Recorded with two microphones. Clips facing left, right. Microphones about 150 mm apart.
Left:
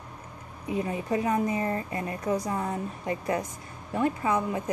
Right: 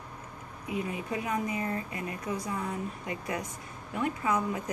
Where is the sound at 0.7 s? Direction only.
35° left (ahead or behind).